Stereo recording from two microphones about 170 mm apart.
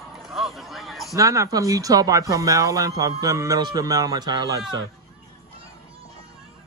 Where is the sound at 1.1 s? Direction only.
20° right (ahead or behind).